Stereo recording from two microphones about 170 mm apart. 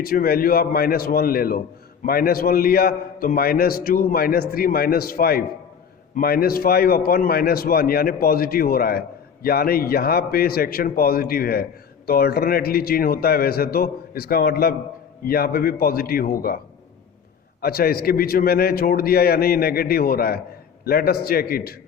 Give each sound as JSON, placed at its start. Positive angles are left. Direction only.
{"t": 0.0, "sound": "a man's voice", "side_deg": 60}
{"t": 17.6, "sound": "a man's voice", "side_deg": 65}